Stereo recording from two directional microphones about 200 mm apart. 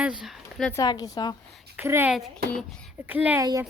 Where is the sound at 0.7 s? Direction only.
20° left (ahead or behind).